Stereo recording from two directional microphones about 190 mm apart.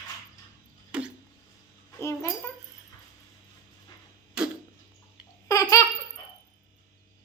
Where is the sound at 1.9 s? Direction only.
15° left (ahead or behind).